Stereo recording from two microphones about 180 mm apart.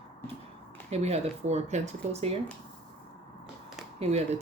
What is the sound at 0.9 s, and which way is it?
Speech, 35° right (ahead or behind).